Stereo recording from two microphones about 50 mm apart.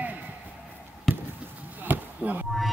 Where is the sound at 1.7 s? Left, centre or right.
Right.